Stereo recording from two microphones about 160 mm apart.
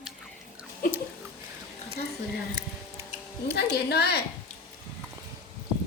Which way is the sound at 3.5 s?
90° left.